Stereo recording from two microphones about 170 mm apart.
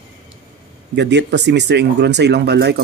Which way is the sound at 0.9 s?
90° right.